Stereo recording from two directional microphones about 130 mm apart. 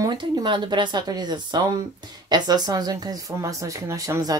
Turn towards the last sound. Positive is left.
turn(degrees=-25)  # may be behind; listen again after turning